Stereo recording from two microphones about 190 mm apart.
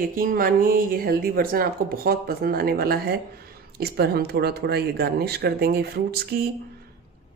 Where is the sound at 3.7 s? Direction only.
55° right (ahead or behind).